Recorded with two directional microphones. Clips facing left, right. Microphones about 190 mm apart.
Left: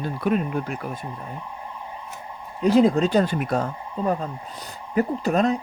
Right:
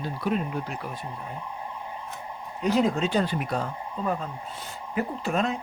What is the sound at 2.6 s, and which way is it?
Speech, 35° left (ahead or behind).